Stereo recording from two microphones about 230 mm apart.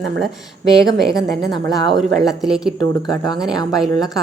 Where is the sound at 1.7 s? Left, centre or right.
Centre.